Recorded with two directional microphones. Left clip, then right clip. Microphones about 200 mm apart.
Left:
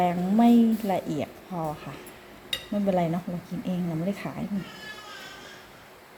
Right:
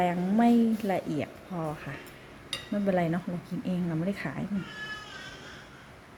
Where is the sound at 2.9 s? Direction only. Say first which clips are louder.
Left 2 dB; 5° right (ahead or behind).